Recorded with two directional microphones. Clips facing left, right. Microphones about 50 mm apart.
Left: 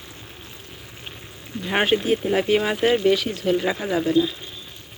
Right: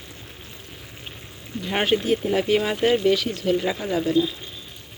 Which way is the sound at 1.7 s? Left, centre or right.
Left.